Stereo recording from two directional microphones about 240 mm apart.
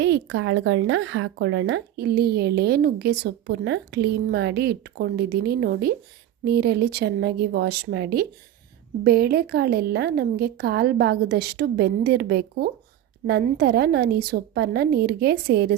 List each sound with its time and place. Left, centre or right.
0.0 s a woman's voice: right